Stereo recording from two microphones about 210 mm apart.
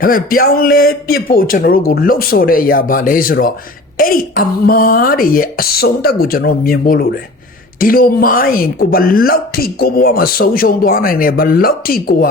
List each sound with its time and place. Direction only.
0.0 s speech: 45° left (ahead or behind)